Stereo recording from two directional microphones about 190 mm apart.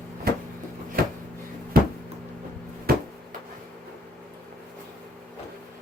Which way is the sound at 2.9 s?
50° right (ahead or behind).